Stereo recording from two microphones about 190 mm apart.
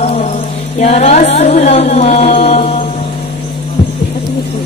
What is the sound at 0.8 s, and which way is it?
Chant, 35° left (ahead or behind).